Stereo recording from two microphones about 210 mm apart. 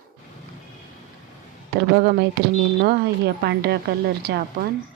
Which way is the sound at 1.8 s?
50° right (ahead or behind).